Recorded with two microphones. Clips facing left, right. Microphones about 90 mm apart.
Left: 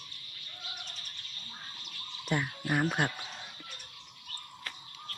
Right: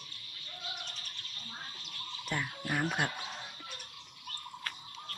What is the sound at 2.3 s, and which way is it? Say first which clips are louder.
Speech: left 4 dB; 10° left (ahead or behind).